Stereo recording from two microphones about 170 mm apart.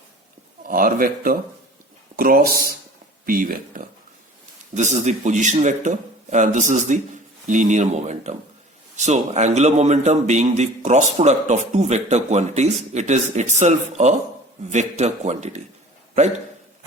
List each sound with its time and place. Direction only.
0.6 s speech: 55° right (ahead or behind)
4.7 s a man's voice: 45° right (ahead or behind)